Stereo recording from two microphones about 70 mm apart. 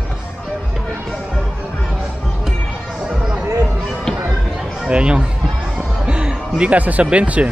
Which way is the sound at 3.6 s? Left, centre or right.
Centre.